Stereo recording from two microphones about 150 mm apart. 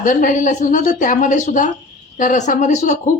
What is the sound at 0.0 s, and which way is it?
Speech, 60° left (ahead or behind).